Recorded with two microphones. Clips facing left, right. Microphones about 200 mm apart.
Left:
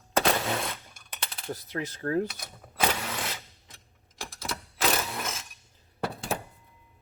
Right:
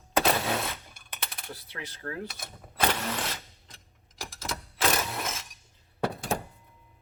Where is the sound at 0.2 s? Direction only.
Centre (ahead or behind).